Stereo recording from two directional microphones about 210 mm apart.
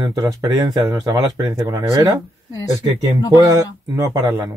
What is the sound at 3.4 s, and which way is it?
Speech, 15° right (ahead or behind).